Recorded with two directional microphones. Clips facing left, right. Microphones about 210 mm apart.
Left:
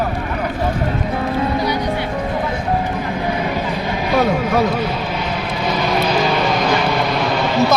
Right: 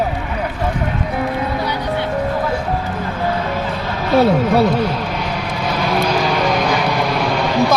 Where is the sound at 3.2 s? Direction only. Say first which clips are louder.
Right 2 dB; 15° left (ahead or behind).